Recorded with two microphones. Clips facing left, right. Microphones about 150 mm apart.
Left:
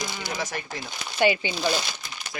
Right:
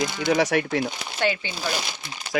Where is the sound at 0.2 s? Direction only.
70° right (ahead or behind).